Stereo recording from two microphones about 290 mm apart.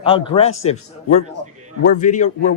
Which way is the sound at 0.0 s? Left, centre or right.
Centre.